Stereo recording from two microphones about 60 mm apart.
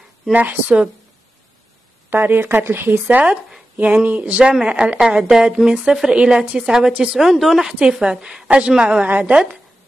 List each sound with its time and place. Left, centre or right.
0.3 s a woman's voice: right
2.0 s speech: right
3.7 s a woman's voice: right
4.2 s a woman's voice: centre
5.3 s speech: centre
7.2 s speech: centre
9.0 s a woman's voice: right